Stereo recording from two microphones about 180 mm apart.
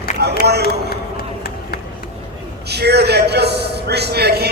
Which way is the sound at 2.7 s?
65° right (ahead or behind).